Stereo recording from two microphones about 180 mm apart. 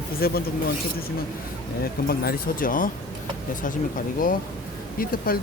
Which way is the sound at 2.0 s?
55° left (ahead or behind).